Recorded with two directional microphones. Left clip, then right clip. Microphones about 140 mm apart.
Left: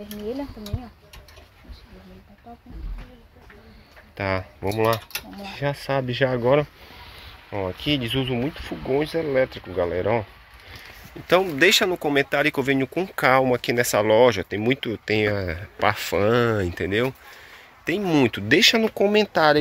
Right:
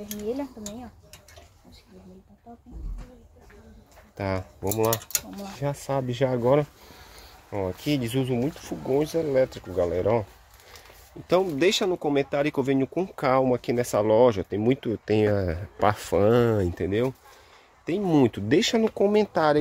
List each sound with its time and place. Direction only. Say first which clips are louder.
4.2 s speech: left 4 dB; 15° right (ahead or behind)
4.6 s speech: left 3 dB; centre (ahead or behind); by 6.7 s 15° right (ahead or behind)
7.8 s speech: left 5 dB; 25° right (ahead or behind)
8.4 s speech: left 1 dB; 10° right (ahead or behind)
11.5 s speech: left 5 dB; 10° right (ahead or behind)
18.9 s speech: left 2 dB; 5° right (ahead or behind)